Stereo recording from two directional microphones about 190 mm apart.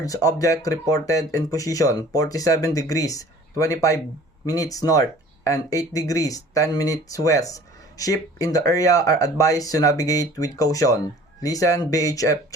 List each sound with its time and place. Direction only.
0.0 s speech: 20° left (ahead or behind)